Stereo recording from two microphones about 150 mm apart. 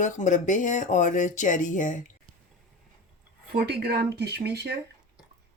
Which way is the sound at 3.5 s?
90° right.